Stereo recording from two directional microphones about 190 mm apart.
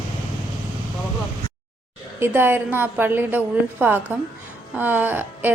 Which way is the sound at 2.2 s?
10° right (ahead or behind).